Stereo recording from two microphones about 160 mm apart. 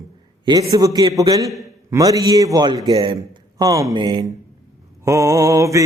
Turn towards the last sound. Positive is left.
turn(degrees=-20)  # may be behind; listen again after turning